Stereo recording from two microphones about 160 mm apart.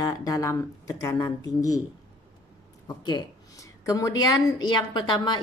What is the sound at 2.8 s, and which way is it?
Speech, 25° left (ahead or behind).